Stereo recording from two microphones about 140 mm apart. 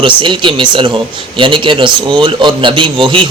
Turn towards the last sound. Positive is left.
turn(degrees=-35)  # may be behind; listen again after turning